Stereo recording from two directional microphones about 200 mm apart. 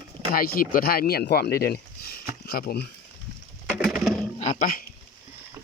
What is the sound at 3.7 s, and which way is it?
Pigeon, 5° right (ahead or behind).